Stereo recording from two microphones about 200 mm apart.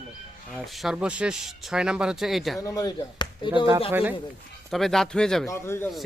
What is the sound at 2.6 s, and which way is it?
Speech, 20° left (ahead or behind).